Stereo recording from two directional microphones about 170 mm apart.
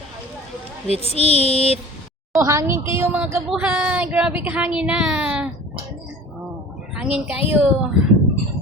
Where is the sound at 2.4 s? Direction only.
15° right (ahead or behind).